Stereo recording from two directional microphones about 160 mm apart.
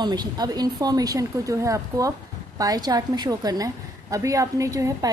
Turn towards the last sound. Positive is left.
turn(degrees=-20)  # may be behind; listen again after turning